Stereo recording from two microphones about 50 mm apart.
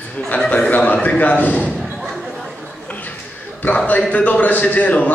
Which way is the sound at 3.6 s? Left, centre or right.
Left.